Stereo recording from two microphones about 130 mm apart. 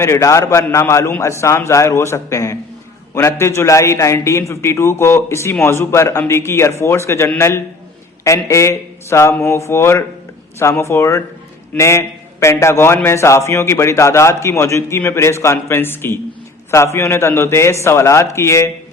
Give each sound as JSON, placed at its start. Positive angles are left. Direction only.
{"t": 0.0, "sound": "a man's voice", "side_deg": 20}